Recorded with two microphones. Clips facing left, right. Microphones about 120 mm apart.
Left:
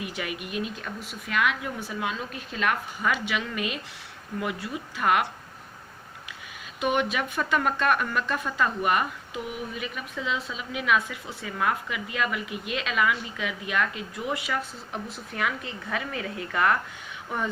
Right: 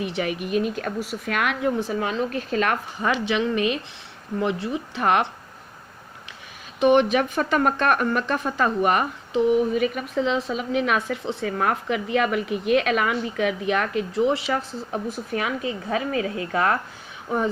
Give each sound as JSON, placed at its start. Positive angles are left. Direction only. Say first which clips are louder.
{"t": 0.0, "sound": "speech", "louder": "right 7 dB", "side_deg": -30}
{"t": 0.8, "sound": "a woman's voice", "louder": "right 9 dB", "side_deg": -60}
{"t": 1.9, "sound": "speech", "louder": "right 7 dB", "side_deg": -40}
{"t": 3.2, "sound": "speech", "louder": "right 8 dB", "side_deg": -25}
{"t": 6.7, "sound": "a woman's voice", "louder": "right 9 dB", "side_deg": -35}
{"t": 10.2, "sound": "a woman's voice", "louder": "right 8 dB", "side_deg": -35}